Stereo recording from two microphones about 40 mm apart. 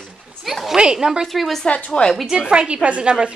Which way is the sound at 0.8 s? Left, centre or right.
Centre.